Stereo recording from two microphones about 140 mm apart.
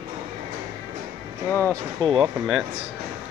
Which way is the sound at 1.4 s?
15° left (ahead or behind).